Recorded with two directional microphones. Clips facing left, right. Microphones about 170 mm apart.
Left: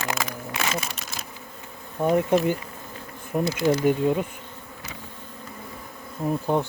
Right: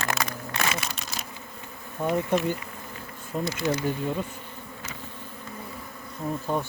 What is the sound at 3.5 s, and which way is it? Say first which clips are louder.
Speech: left 5 dB; 30° left (ahead or behind).